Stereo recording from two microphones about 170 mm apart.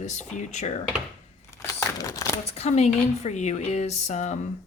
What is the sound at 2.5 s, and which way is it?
Speech, 40° left (ahead or behind).